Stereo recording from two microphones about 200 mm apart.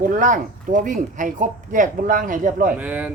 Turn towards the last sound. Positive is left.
turn(degrees=-10)  # may be behind; listen again after turning